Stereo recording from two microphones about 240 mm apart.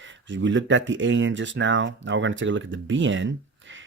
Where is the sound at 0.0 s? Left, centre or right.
Right.